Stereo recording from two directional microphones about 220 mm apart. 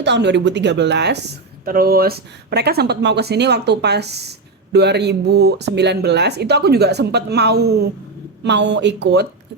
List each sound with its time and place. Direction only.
0.0 s speech: 50° right (ahead or behind)